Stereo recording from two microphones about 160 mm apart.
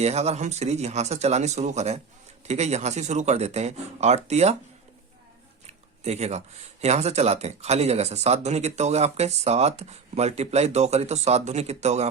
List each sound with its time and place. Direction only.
0.0 s speech: 40° right (ahead or behind)
5.6 s a sound: 45° right (ahead or behind)
6.8 s speech: 45° right (ahead or behind)